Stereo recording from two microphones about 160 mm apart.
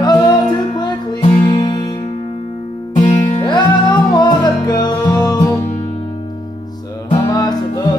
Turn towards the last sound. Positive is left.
turn(degrees=25)  # may be behind; listen again after turning